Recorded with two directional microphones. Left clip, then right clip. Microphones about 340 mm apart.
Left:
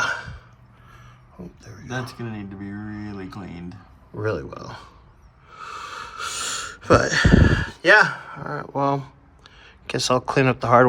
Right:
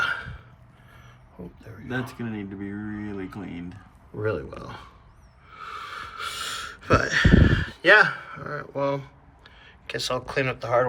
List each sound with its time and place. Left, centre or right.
1.6 s speech: centre
1.9 s speech: left
4.2 s speech: centre
5.6 s a sound: centre